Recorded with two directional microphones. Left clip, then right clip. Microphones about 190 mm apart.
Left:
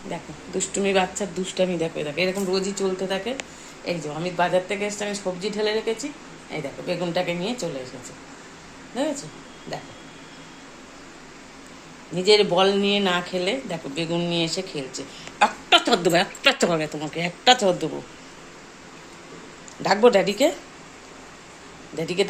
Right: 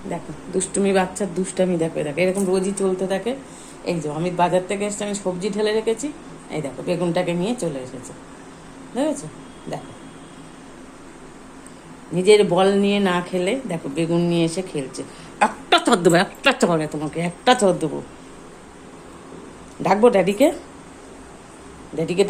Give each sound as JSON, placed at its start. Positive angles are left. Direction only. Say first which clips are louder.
{"t": 0.1, "sound": "a woman's voice", "louder": "right 4 dB", "side_deg": 5}
{"t": 8.9, "sound": "a woman's voice", "louder": "right 3 dB", "side_deg": 5}
{"t": 12.1, "sound": "speech", "louder": "right 3 dB", "side_deg": 0}
{"t": 15.8, "sound": "speech", "louder": "right 3 dB", "side_deg": -15}
{"t": 16.4, "sound": "speech", "louder": "right 2 dB", "side_deg": 0}
{"t": 19.8, "sound": "speech", "louder": "right 2 dB", "side_deg": 0}
{"t": 21.9, "sound": "speech", "louder": "right 4 dB", "side_deg": 0}